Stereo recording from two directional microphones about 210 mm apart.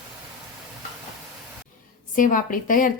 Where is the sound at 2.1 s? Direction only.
40° left (ahead or behind).